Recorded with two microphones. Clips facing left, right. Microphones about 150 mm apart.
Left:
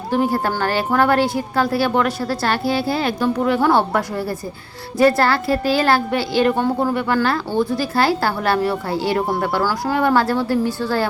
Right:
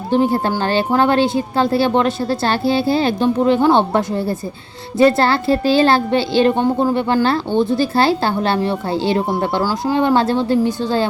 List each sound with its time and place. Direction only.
0.1 s a child's voice: 25° right (ahead or behind)